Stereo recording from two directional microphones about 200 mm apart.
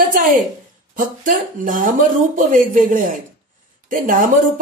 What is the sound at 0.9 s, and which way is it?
Speech, 40° right (ahead or behind).